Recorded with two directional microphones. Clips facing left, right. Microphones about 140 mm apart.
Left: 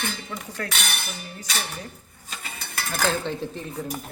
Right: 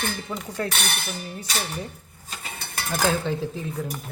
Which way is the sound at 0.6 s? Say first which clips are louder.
Right 5 dB; 25° right (ahead or behind).